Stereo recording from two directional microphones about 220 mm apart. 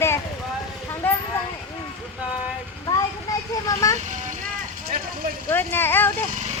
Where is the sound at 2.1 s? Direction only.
5° right (ahead or behind).